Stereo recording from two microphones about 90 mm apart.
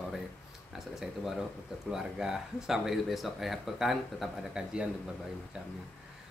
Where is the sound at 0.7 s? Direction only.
5° right (ahead or behind).